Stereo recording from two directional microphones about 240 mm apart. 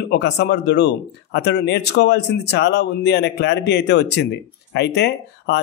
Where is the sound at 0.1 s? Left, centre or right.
Left.